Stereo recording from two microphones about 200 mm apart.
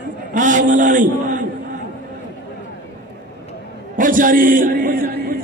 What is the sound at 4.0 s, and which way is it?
A man's voice, 40° right (ahead or behind).